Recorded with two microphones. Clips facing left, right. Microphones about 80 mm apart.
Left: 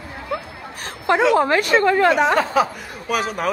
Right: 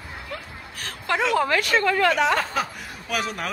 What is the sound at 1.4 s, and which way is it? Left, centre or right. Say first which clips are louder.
Speech: left 5 dB; left.